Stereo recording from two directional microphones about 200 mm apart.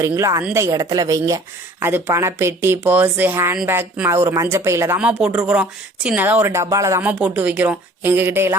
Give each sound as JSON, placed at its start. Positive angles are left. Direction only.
{"t": 0.0, "sound": "speech", "side_deg": -15}